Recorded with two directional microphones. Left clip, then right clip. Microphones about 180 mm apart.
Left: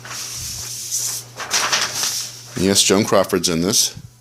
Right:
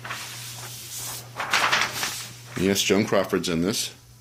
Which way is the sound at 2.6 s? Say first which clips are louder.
Left 6 dB; 25° left (ahead or behind).